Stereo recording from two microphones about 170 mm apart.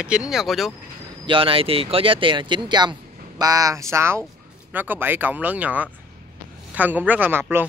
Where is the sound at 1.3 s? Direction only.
30° right (ahead or behind).